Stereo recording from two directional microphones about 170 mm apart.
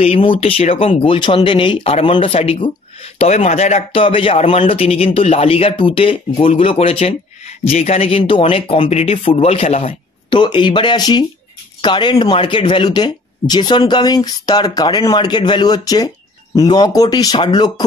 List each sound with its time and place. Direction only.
0.0 s speech: 35° left (ahead or behind)